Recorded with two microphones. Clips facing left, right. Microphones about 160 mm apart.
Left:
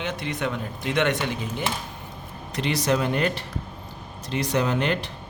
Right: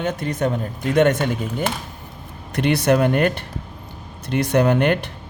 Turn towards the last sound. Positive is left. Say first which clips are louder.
# right 7 dB
turn(degrees=-60)  # may be behind; listen again after turning